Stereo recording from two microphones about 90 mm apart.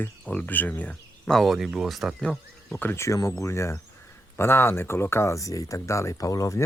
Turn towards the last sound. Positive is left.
turn(degrees=40)  # may be behind; listen again after turning